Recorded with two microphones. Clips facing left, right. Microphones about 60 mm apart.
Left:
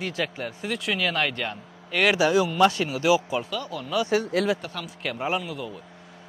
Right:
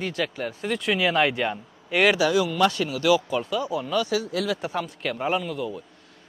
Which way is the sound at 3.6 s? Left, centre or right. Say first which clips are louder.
Right 6 dB; centre.